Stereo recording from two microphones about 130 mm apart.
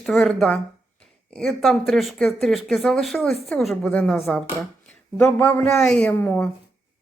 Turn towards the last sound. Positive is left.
turn(degrees=15)  # may be behind; listen again after turning